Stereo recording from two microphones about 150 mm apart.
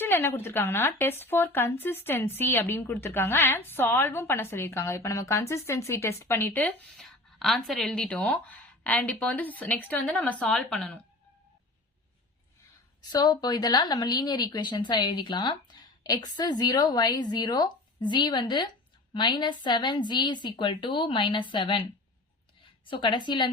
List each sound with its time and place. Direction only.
0.0 s speech: 15° left (ahead or behind)
13.0 s a woman's voice: 30° left (ahead or behind)
22.9 s a woman's voice: 30° left (ahead or behind)